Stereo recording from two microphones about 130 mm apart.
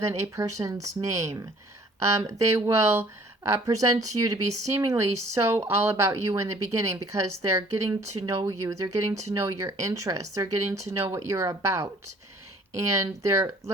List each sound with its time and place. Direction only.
0.0 s speech: 25° right (ahead or behind)
12.9 s speech: 25° right (ahead or behind)